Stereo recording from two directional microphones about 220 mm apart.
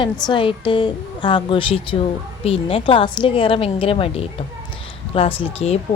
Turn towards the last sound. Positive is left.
turn(degrees=30)  # may be behind; listen again after turning